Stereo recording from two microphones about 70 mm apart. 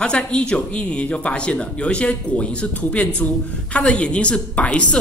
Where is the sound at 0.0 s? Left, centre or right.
Centre.